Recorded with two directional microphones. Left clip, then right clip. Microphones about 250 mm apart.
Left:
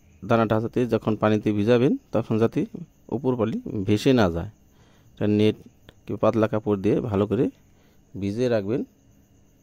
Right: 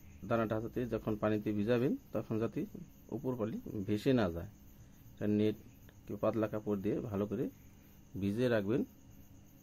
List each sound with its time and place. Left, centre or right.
0.3 s a man's voice: left
8.2 s speech: left